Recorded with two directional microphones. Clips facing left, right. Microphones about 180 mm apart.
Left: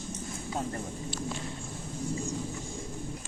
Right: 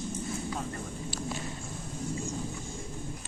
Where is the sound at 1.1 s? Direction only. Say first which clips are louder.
Even; 5° right (ahead or behind).